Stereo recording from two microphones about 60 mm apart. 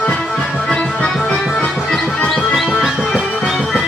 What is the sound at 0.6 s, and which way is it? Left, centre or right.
Music, centre.